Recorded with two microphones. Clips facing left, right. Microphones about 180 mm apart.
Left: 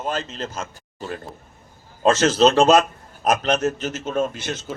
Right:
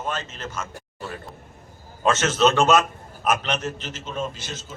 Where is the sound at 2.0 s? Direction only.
35° left (ahead or behind).